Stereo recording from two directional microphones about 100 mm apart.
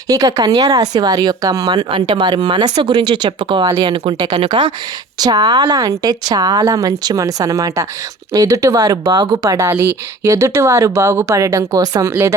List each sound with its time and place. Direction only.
0.1 s speech: 35° right (ahead or behind)
1.9 s speech: 55° right (ahead or behind)
4.4 s speech: 85° right
5.2 s speech: 40° right (ahead or behind)
9.1 s speech: 50° right (ahead or behind)
9.4 s speech: 30° right (ahead or behind)